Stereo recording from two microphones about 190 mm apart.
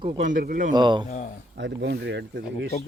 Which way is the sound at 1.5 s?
65° right (ahead or behind).